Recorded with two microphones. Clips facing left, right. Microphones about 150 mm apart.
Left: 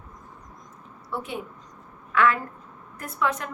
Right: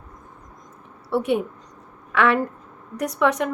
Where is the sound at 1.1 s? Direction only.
70° right (ahead or behind).